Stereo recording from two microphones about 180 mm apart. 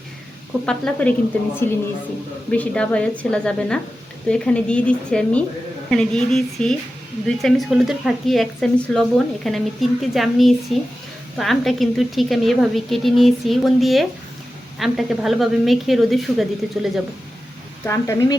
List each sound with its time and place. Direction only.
0.6 s a woman's voice: 5° left (ahead or behind)
17.8 s a woman's voice: 15° left (ahead or behind)